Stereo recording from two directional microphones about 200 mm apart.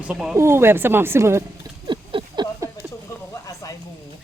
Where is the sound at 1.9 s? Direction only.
20° right (ahead or behind).